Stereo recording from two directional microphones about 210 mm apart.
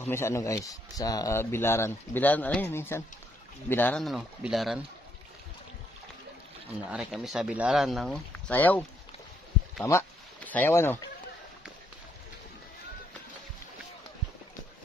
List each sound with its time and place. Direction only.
0.0 s speech: 10° left (ahead or behind)
6.9 s speech: centre (ahead or behind)
9.8 s speech: 10° left (ahead or behind)